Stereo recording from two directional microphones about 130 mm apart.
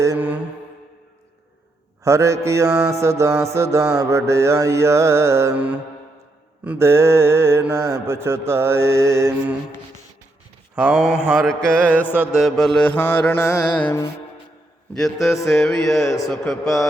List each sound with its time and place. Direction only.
0.2 s mantra: 10° right (ahead or behind)
2.0 s mantra: 20° right (ahead or behind)
10.8 s mantra: 5° right (ahead or behind)
11.4 s mantra: 5° left (ahead or behind)
12.2 s mantra: centre (ahead or behind)
14.9 s music: centre (ahead or behind)